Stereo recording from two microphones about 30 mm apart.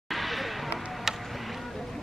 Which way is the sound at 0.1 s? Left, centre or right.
Centre.